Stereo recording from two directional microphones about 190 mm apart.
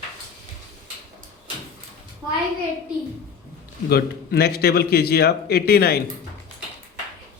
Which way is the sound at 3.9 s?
55° left (ahead or behind).